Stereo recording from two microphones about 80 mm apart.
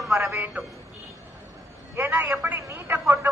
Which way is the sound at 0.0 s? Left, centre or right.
Centre.